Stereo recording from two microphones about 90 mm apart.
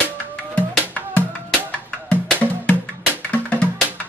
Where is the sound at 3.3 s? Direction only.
15° left (ahead or behind).